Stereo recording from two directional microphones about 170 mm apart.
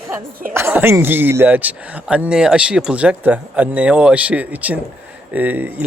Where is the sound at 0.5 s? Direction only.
15° right (ahead or behind).